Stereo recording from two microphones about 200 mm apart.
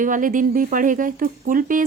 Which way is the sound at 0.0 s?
40° right (ahead or behind).